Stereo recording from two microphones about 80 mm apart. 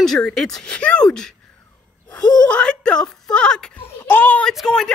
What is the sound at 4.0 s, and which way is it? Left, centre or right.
Speech, left.